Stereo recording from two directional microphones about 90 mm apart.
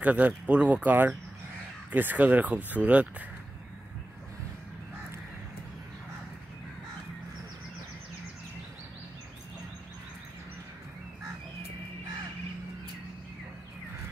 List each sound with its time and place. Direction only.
0.0 s speech: 15° right (ahead or behind)